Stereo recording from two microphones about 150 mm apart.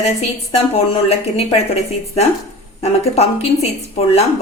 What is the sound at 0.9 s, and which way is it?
Speech, 40° left (ahead or behind).